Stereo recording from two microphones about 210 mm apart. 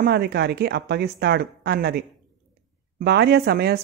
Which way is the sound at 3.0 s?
50° right (ahead or behind).